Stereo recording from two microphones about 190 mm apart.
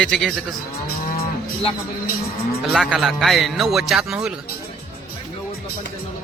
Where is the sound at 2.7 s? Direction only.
Centre (ahead or behind).